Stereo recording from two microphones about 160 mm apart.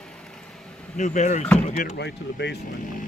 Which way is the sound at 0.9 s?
50° left (ahead or behind).